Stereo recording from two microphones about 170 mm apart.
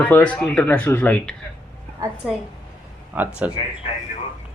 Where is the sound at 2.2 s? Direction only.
5° right (ahead or behind).